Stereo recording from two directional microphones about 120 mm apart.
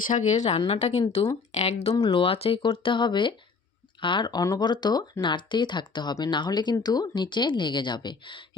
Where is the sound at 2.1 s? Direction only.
50° left (ahead or behind).